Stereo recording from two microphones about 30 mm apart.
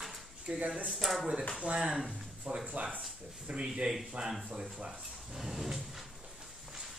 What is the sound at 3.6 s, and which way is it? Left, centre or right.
Speech, right.